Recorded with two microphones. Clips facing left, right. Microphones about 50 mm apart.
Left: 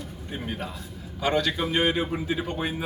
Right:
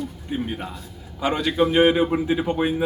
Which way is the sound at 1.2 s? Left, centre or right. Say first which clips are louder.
Right 4 dB; centre.